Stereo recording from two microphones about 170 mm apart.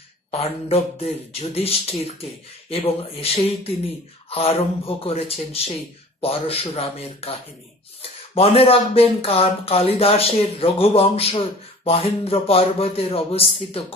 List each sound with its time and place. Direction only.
0.3 s speech: 35° left (ahead or behind)
6.2 s speech: 35° left (ahead or behind)